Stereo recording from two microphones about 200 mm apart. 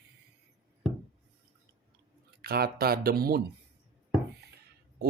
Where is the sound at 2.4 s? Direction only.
50° right (ahead or behind).